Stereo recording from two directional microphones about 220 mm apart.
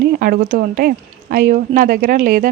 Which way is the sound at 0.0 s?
45° right (ahead or behind).